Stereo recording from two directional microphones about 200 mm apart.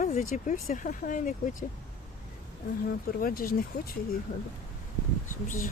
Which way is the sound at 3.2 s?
45° left (ahead or behind).